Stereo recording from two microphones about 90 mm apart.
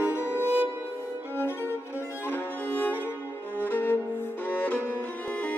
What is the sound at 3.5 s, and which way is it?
Music, 20° left (ahead or behind).